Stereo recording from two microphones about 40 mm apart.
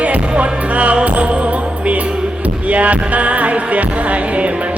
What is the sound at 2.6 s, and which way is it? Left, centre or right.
Music, right.